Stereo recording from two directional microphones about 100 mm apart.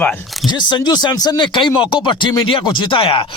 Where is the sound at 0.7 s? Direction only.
45° left (ahead or behind).